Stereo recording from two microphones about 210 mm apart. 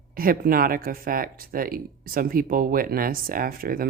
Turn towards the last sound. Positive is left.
turn(degrees=-45)  # may be behind; listen again after turning